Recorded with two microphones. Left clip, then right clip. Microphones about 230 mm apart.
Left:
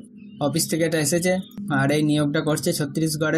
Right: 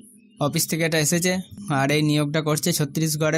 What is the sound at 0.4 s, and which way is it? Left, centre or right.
Speech, right.